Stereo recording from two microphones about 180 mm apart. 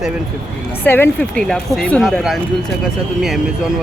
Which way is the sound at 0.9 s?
10° left (ahead or behind).